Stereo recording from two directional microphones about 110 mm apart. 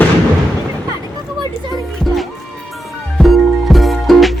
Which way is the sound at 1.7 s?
Centre (ahead or behind).